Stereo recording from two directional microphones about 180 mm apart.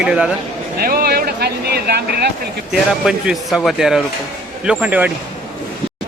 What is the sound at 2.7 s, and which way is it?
Speech, centre (ahead or behind).